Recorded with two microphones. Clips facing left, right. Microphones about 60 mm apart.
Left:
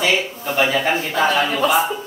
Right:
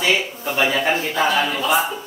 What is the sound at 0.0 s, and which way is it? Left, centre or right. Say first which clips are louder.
Speech: left 1 dB; centre.